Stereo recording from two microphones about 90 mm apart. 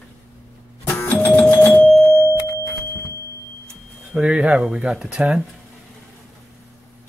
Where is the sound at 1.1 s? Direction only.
15° left (ahead or behind).